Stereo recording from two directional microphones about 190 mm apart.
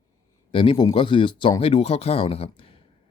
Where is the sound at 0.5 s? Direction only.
25° left (ahead or behind).